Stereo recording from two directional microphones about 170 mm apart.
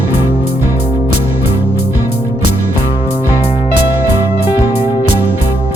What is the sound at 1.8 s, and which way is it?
Music, 75° left (ahead or behind).